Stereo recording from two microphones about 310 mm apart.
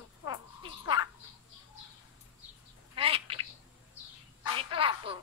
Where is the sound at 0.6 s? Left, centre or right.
Centre.